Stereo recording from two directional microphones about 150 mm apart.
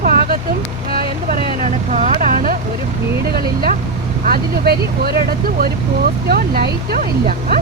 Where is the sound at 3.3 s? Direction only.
90° right.